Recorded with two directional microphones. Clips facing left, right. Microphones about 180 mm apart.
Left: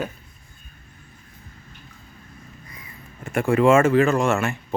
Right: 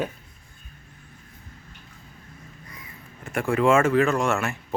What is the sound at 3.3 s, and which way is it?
Speech, centre (ahead or behind).